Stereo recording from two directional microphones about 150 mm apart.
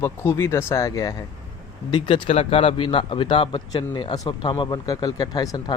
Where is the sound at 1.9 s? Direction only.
35° left (ahead or behind).